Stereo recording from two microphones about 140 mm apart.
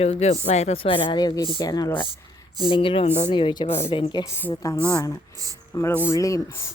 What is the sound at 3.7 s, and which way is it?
Speech, 45° left (ahead or behind).